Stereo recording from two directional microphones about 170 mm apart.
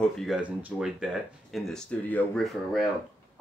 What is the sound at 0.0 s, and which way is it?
Speech, centre (ahead or behind).